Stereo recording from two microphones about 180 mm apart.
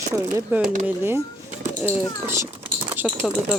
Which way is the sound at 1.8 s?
15° right (ahead or behind).